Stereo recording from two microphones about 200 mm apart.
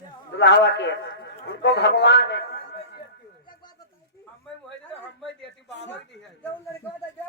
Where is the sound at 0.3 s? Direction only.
60° left (ahead or behind).